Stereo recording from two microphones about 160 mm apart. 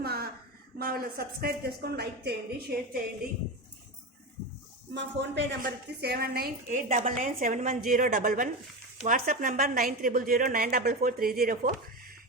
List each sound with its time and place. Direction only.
0.0 s a sound: 75° right (ahead or behind)
0.8 s a woman's voice: 65° right (ahead or behind); by 2.6 s 90° right
4.9 s a woman's voice: 90° right; by 12.1 s 65° right (ahead or behind)